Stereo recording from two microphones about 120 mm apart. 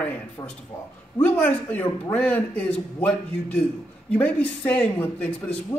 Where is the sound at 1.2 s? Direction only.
15° left (ahead or behind).